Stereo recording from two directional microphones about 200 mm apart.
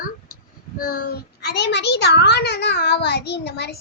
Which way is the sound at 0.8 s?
45° left (ahead or behind).